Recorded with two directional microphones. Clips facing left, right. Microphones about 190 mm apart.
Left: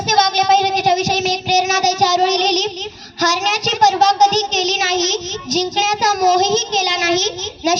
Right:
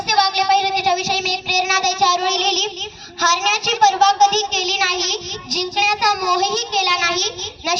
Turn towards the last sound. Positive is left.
turn(degrees=20)  # may be behind; listen again after turning